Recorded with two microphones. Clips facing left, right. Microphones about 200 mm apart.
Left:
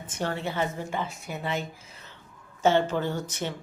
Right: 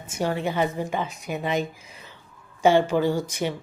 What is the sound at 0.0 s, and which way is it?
Speech, 10° right (ahead or behind).